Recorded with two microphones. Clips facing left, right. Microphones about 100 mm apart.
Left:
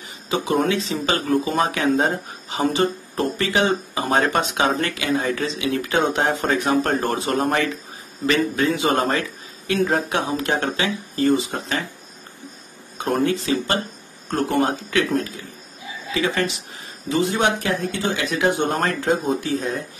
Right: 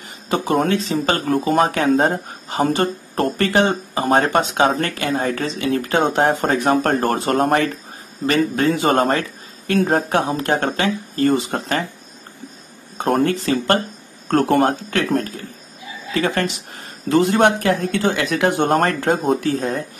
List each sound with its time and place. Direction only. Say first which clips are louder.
0.3 s speech: right 2 dB; 50° right (ahead or behind)
12.9 s speech: right 3 dB; 50° right (ahead or behind)